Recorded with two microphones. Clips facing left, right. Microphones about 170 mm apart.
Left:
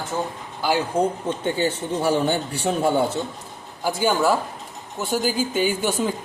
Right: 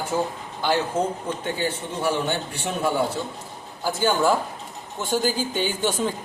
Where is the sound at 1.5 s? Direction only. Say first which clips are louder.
Left 4 dB; 30° left (ahead or behind).